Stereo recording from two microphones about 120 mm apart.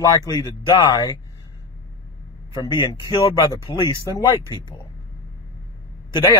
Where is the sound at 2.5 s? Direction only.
40° left (ahead or behind).